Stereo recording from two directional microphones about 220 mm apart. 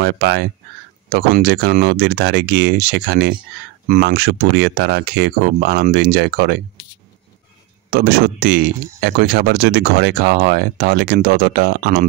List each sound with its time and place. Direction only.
0.0 s speech: 50° right (ahead or behind)
7.9 s speech: 45° right (ahead or behind)